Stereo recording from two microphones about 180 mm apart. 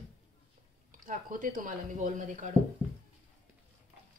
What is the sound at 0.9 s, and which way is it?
Speech, 50° right (ahead or behind).